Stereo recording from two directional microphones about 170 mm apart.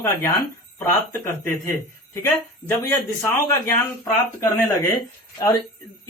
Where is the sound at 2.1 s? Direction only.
15° left (ahead or behind).